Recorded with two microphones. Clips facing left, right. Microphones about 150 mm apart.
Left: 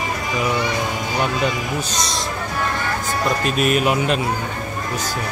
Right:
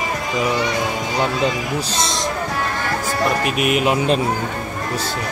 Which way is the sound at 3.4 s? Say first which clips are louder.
Left 3 dB; 15° right (ahead or behind).